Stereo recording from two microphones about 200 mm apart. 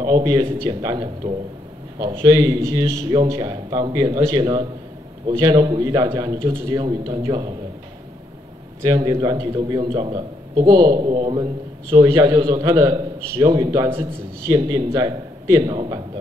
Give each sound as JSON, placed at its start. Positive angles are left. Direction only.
{"t": 0.0, "sound": "a man's voice", "side_deg": -20}
{"t": 8.8, "sound": "a man's voice", "side_deg": -15}